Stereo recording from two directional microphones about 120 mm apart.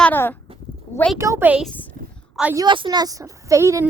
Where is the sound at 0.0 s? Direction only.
15° left (ahead or behind).